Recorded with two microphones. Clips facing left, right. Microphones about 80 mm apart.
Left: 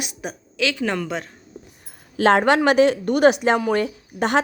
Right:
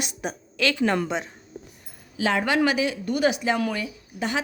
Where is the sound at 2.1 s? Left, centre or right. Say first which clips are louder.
Left 7 dB; left.